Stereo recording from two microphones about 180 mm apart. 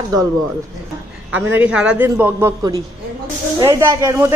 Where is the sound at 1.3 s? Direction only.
10° right (ahead or behind).